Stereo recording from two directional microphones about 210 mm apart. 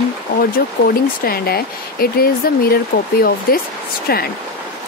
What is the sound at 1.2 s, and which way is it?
Speech, 45° left (ahead or behind).